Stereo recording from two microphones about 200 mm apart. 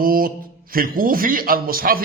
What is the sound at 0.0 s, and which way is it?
A man's voice, 45° right (ahead or behind).